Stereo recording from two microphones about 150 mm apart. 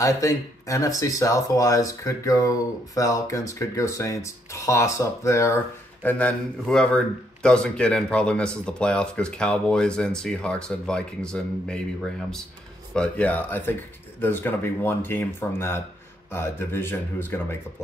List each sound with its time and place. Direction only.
0.0 s speech: 20° left (ahead or behind)